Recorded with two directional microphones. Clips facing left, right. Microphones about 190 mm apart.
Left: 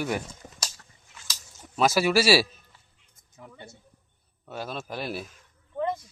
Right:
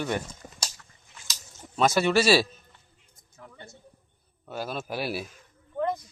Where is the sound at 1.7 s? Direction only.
5° left (ahead or behind).